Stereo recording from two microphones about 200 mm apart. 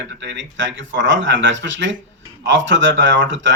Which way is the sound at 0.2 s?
65° right (ahead or behind).